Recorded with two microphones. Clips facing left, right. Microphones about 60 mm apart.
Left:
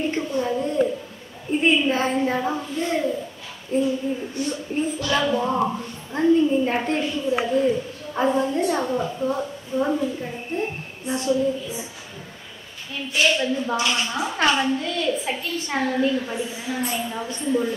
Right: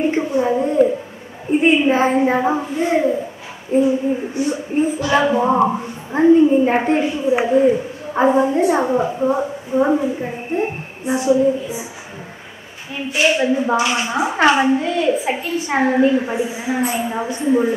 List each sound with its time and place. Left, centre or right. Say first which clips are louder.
0.0 s a sound: right 7 dB; right
1.5 s a woman's voice: right 6 dB; right
11.1 s a woman's voice: right 7 dB; centre
12.9 s a woman's voice: right 4 dB; right
16.3 s a woman's voice: right 7 dB; centre